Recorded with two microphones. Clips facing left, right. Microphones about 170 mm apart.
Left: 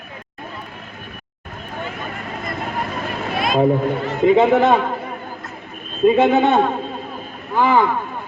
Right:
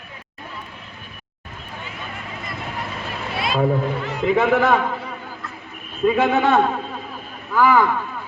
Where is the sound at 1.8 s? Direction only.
50° left (ahead or behind).